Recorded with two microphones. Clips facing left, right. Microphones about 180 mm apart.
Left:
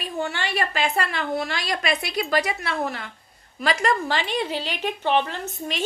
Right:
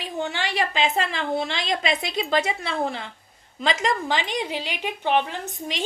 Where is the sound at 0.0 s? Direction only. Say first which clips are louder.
Even; 15° right (ahead or behind).